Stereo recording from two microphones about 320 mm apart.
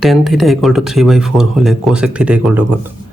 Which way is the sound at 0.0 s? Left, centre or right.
Centre.